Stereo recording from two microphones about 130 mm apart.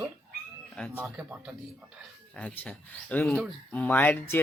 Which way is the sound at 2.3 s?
10° left (ahead or behind).